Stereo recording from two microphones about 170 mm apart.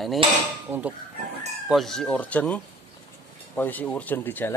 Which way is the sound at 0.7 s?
10° right (ahead or behind).